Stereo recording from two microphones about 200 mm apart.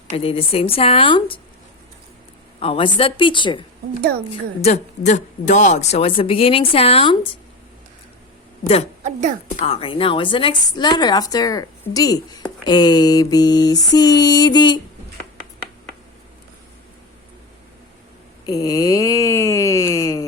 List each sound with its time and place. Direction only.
0.1 s a woman's voice: 30° left (ahead or behind)
2.6 s a woman's voice: 25° left (ahead or behind)
4.6 s a woman's voice: 35° left (ahead or behind)
8.6 s a woman's voice: 30° left (ahead or behind)
18.4 s a sound: 20° left (ahead or behind)